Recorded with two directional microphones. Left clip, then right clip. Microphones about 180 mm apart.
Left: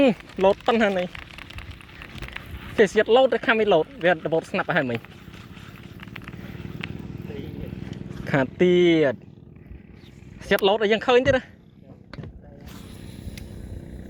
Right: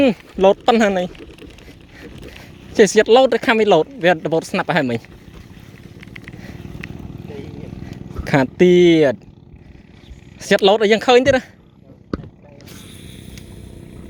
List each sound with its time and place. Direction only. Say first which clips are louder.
0.0 s speech: right 5 dB; 55° right (ahead or behind)
2.7 s speech: right 6 dB; 55° right (ahead or behind)
6.0 s vehicle: right 3 dB; 10° right (ahead or behind)
8.2 s speech: right 7 dB; 50° right (ahead or behind)
10.4 s speech: right 7 dB; 55° right (ahead or behind)